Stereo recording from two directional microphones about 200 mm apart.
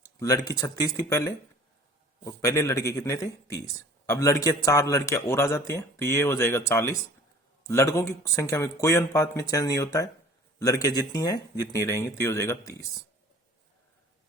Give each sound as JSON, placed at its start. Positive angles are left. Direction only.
{"t": 0.0, "sound": "a man's voice", "side_deg": 15}